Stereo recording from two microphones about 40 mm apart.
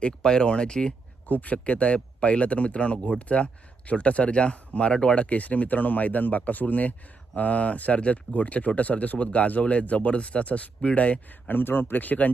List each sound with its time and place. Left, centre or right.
0.0 s speech: left
1.3 s speech: left
11.3 s speech: left